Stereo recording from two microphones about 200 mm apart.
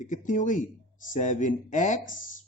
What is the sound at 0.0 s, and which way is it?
Speech, 40° left (ahead or behind).